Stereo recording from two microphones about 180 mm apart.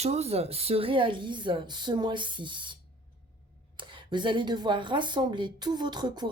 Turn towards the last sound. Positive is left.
turn(degrees=-25)  # may be behind; listen again after turning